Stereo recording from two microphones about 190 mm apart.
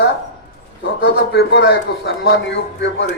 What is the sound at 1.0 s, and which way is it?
A man's voice, 60° left (ahead or behind).